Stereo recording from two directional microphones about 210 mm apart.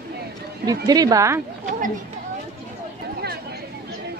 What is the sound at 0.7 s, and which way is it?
Speech, 20° right (ahead or behind).